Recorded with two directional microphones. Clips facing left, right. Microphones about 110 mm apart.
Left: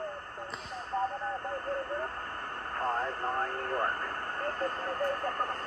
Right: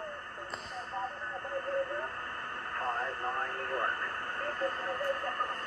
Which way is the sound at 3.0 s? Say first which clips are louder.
Left 3 dB; 30° left (ahead or behind).